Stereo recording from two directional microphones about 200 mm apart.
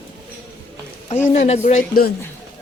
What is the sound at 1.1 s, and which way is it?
A woman's voice, 35° left (ahead or behind).